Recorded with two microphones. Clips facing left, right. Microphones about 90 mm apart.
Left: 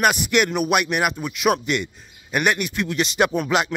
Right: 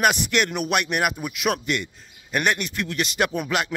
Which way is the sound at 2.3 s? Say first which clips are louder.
Left 2 dB; 10° left (ahead or behind).